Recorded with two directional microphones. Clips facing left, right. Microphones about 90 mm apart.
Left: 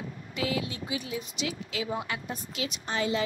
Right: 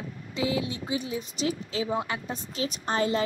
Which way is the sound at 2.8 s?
40° right (ahead or behind).